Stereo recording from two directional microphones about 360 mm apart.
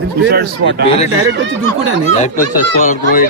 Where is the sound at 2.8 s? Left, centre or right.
Left.